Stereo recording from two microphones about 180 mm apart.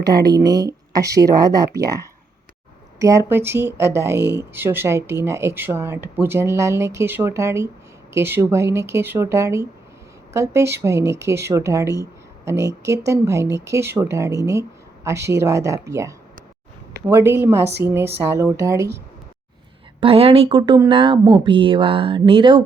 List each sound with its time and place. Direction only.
0.1 s speech: 20° right (ahead or behind)
3.0 s speech: 15° right (ahead or behind)
20.0 s speech: 30° right (ahead or behind)